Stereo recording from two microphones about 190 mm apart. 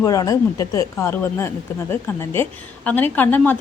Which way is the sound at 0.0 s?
20° left (ahead or behind).